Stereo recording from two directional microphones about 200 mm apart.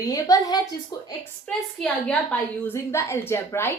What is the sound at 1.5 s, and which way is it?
A woman's voice, 5° left (ahead or behind).